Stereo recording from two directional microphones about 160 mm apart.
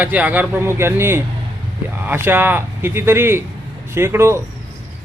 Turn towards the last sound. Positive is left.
turn(degrees=-15)  # may be behind; listen again after turning